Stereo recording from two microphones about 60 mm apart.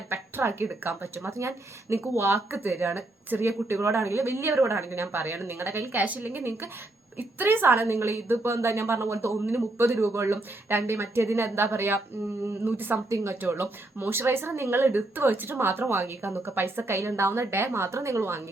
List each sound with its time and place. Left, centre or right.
0.1 s speech: right
13.1 s a woman's voice: right
13.4 s speech: right